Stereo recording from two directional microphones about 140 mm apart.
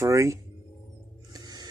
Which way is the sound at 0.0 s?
20° right (ahead or behind).